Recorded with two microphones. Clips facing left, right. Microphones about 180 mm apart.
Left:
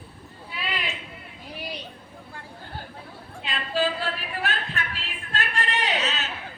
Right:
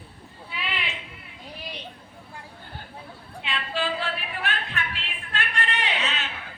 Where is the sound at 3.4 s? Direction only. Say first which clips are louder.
Left 3 dB; 40° left (ahead or behind).